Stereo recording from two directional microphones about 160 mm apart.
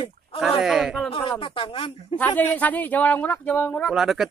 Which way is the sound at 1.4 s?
35° left (ahead or behind).